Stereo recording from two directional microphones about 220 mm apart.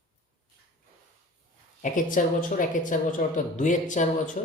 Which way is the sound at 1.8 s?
35° left (ahead or behind).